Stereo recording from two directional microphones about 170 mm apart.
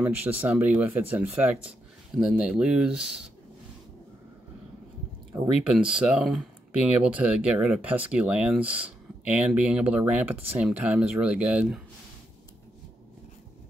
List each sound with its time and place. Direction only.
0.0 s speech: 10° right (ahead or behind)
5.7 s speech: 5° right (ahead or behind)